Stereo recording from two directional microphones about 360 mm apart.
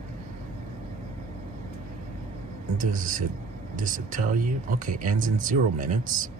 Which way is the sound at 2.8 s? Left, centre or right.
Right.